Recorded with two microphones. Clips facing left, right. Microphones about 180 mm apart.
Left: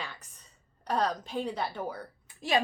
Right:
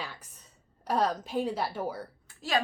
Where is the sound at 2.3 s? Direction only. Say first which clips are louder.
Left 1 dB; 20° left (ahead or behind).